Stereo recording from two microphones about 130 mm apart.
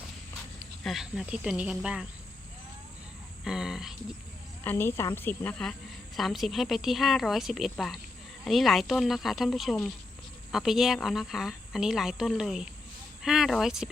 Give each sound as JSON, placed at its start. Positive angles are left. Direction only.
{"t": 0.9, "sound": "speech", "side_deg": 0}
{"t": 3.4, "sound": "speech", "side_deg": -5}
{"t": 4.6, "sound": "speech", "side_deg": 20}